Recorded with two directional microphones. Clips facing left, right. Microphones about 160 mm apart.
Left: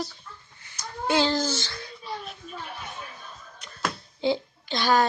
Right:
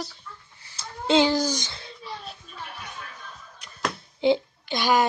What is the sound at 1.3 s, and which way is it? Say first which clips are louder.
Babbling: right 2 dB; 10° right (ahead or behind).